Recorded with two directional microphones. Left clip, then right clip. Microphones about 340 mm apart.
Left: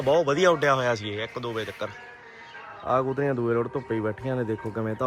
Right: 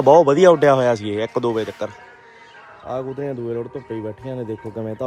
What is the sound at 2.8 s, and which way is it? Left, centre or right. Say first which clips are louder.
Speech: left 2 dB; centre.